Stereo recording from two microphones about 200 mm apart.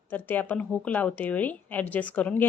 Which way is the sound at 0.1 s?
10° left (ahead or behind).